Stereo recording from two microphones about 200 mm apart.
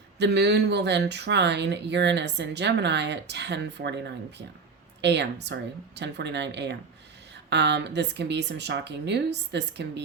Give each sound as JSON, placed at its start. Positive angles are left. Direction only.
{"t": 0.2, "sound": "speech", "side_deg": -55}